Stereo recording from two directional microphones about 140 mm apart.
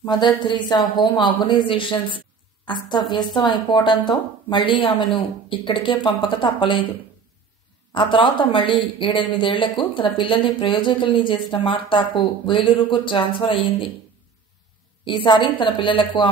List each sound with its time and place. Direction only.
0.0 s a woman's voice: 30° left (ahead or behind)
7.9 s a woman's voice: 35° left (ahead or behind)
15.0 s a woman's voice: 35° left (ahead or behind)